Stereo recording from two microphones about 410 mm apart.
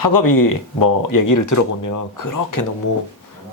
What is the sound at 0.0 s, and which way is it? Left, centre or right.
Speech, left.